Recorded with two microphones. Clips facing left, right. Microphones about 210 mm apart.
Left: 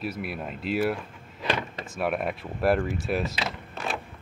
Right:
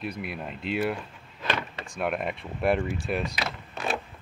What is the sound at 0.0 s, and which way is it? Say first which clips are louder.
Speech: left 2 dB; 5° left (ahead or behind).